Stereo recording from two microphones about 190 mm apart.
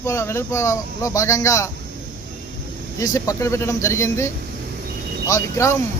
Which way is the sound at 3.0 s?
15° left (ahead or behind).